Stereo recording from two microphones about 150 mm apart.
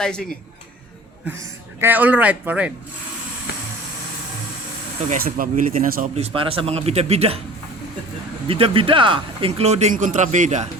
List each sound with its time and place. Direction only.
0.0 s speech: 5° left (ahead or behind)
1.4 s speech: 15° right (ahead or behind)
5.2 s speech: 70° right (ahead or behind)
6.1 s speech: 40° right (ahead or behind)
8.4 s speech: 40° right (ahead or behind)
9.9 s speech: 60° right (ahead or behind)